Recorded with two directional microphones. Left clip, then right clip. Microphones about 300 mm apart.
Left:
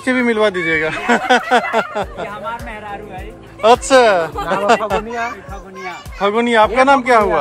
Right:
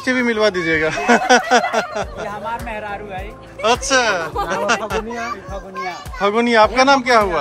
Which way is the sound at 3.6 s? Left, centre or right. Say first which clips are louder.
Left 6 dB; centre.